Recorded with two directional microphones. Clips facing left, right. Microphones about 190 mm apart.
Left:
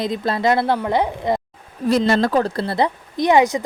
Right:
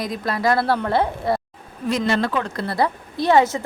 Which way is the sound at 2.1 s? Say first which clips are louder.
Left 4 dB; 40° left (ahead or behind).